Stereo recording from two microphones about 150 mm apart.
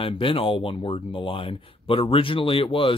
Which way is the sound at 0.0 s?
35° left (ahead or behind).